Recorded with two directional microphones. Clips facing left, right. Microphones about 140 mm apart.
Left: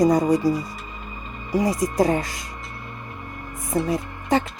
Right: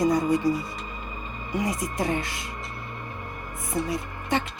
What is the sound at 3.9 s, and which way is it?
Speech, 35° left (ahead or behind).